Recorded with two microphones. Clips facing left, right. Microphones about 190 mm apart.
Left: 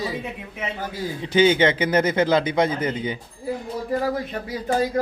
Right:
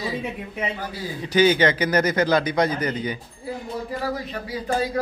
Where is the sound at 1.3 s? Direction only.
25° left (ahead or behind).